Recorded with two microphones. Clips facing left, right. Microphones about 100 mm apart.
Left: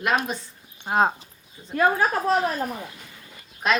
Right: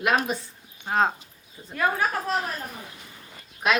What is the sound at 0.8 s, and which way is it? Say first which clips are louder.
Speech: left 2 dB; 15° left (ahead or behind).